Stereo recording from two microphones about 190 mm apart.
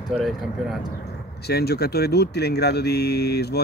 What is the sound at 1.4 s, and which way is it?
Speech, 55° left (ahead or behind).